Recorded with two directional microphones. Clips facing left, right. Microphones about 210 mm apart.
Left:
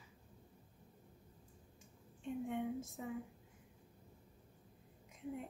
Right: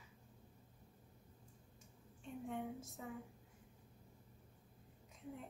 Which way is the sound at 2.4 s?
20° left (ahead or behind).